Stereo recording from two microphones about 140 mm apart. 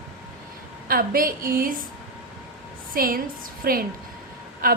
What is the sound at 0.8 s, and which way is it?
A woman's voice, 90° right.